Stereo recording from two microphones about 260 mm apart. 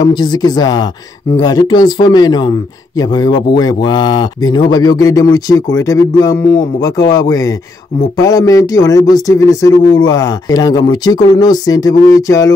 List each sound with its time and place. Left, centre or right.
0.0 s speech: centre